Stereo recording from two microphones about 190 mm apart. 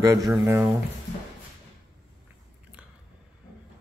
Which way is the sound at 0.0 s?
15° right (ahead or behind).